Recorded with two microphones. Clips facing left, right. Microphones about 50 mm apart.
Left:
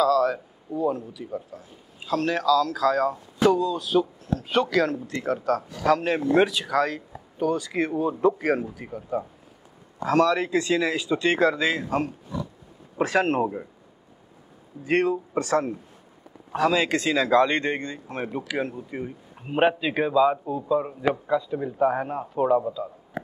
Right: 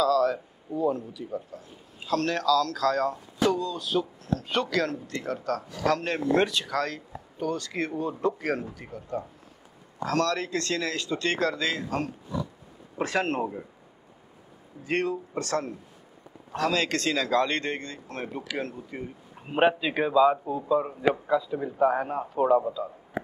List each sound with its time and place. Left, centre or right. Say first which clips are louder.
0.0 s a man's voice: left 2 dB; centre
14.9 s speech: left 5 dB; centre
19.4 s a man's voice: left 1 dB; centre